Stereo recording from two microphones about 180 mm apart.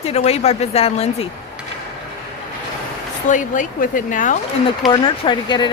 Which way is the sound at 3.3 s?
45° left (ahead or behind).